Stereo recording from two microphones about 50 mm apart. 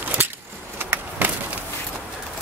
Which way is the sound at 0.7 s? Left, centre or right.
Right.